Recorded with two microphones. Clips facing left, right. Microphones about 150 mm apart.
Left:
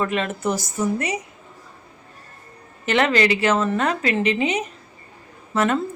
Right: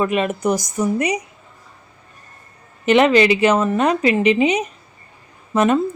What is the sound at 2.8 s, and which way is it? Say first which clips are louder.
Speech: right 6 dB; 15° right (ahead or behind).